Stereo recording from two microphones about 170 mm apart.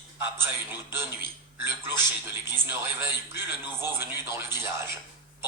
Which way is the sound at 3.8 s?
15° right (ahead or behind).